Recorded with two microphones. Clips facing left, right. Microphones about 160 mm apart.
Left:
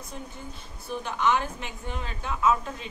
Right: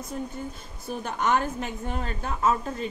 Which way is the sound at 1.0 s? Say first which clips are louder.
Right 1 dB; 45° right (ahead or behind).